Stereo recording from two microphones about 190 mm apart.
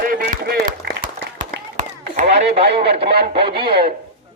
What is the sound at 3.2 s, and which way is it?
Speech, 30° right (ahead or behind).